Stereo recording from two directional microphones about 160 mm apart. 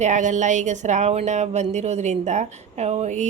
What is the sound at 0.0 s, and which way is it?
A woman's voice, 50° right (ahead or behind).